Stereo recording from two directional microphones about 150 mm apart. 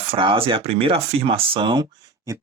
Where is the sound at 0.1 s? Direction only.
35° right (ahead or behind).